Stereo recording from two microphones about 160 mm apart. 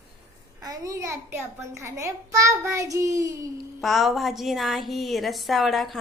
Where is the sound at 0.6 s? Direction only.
20° right (ahead or behind).